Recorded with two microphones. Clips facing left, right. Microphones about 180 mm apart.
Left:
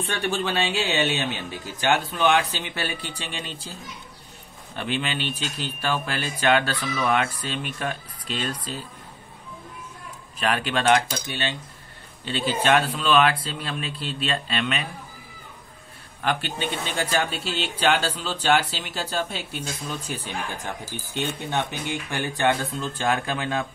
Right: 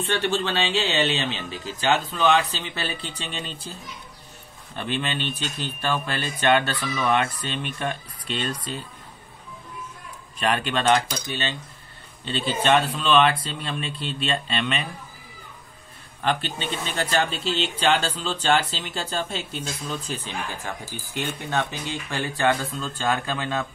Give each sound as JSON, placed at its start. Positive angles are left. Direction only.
{"t": 0.2, "sound": "speech", "side_deg": 15}
{"t": 4.7, "sound": "speech", "side_deg": 10}
{"t": 10.4, "sound": "speech", "side_deg": 5}
{"t": 16.3, "sound": "speech", "side_deg": 10}